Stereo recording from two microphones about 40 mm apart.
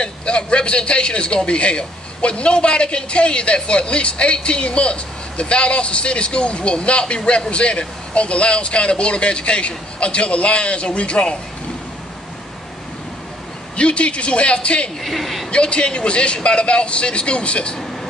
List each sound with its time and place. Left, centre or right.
0.0 s a man's voice: left
13.7 s a man's voice: left
15.0 s a woman's voice: centre
15.5 s a man's voice: left